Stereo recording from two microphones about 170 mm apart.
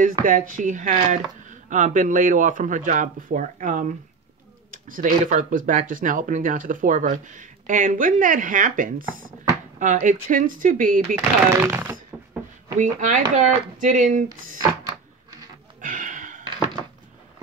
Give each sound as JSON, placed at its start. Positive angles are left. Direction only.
{"t": 0.0, "sound": "speech", "side_deg": -50}
{"t": 4.6, "sound": "a sound", "side_deg": -55}
{"t": 5.2, "sound": "speech", "side_deg": -50}
{"t": 11.1, "sound": "speech", "side_deg": -15}
{"t": 12.7, "sound": "speech", "side_deg": -45}
{"t": 15.8, "sound": "a sound", "side_deg": -50}